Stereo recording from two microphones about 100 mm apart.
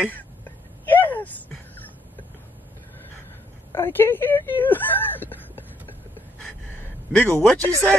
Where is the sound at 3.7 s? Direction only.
25° left (ahead or behind).